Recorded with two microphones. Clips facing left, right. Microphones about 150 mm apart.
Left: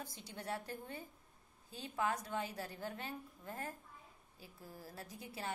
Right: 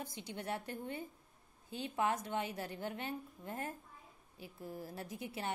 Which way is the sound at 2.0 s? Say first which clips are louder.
Right 2 dB; 25° right (ahead or behind).